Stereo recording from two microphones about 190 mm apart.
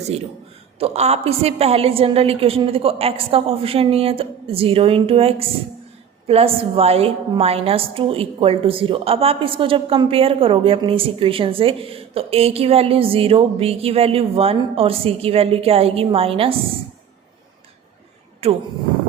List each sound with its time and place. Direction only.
0.8 s a woman's voice: 35° right (ahead or behind)
18.4 s a woman's voice: 35° right (ahead or behind)